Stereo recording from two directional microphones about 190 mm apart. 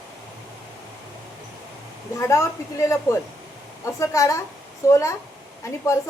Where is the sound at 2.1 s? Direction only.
15° left (ahead or behind).